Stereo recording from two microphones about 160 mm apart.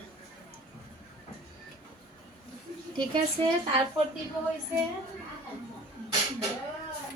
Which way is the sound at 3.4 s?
35° right (ahead or behind).